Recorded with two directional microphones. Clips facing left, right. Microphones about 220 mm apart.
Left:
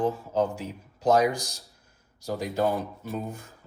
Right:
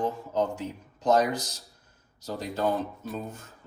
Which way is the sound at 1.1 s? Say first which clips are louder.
Left 1 dB; 10° left (ahead or behind).